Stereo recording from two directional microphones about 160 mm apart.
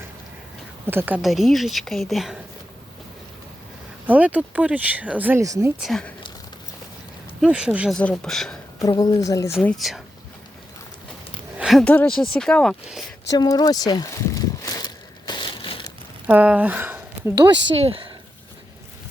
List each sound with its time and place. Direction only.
0.9 s speech: 10° right (ahead or behind)
1.2 s speech: centre (ahead or behind)
4.0 s speech: 10° right (ahead or behind)
5.8 s speech: 5° left (ahead or behind)
7.4 s speech: 5° right (ahead or behind)
7.9 s speech: 5° left (ahead or behind)
8.8 s speech: 25° left (ahead or behind)
9.6 s speech: centre (ahead or behind)
11.5 s speech: 5° right (ahead or behind)
13.2 s a sound: 25° left (ahead or behind)
16.2 s speech: 10° right (ahead or behind)
17.7 s speech: 35° right (ahead or behind)